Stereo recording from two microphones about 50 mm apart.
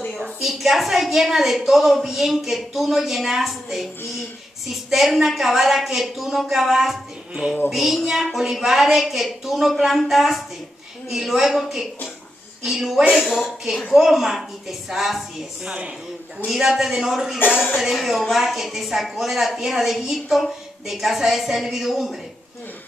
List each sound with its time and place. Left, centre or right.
0.2 s a woman's voice: centre
4.9 s a woman's voice: centre
13.7 s a woman's voice: centre
14.0 s a woman's voice: centre
15.6 s speech: right
16.4 s a woman's voice: centre